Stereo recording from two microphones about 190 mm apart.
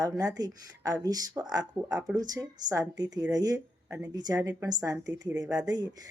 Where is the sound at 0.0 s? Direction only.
20° right (ahead or behind).